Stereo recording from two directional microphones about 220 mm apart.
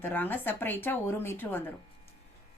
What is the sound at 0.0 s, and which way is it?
Speech, 10° left (ahead or behind).